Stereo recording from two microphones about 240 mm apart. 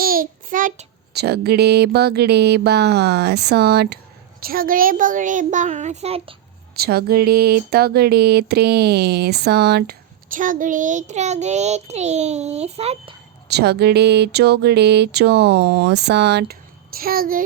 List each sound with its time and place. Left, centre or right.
0.0 s a child's voice: right
6.7 s speech: right
13.5 s a sound: right